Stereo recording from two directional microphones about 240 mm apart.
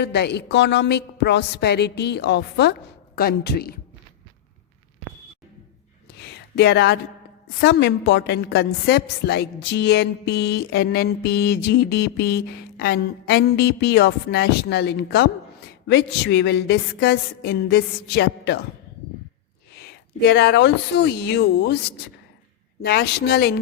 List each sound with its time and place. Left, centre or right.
0.0 s a woman's voice: left
6.1 s a sound: left
7.6 s a woman's voice: left
19.7 s speech: left
22.8 s a woman's voice: left